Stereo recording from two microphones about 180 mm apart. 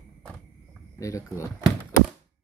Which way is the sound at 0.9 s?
15° left (ahead or behind).